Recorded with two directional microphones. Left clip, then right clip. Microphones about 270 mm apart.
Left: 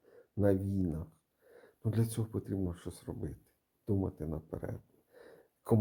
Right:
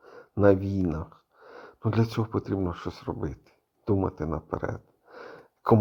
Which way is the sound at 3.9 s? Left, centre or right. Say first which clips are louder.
Right 9 dB; centre.